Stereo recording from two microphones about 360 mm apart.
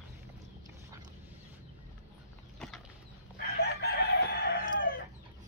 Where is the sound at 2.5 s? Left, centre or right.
Centre.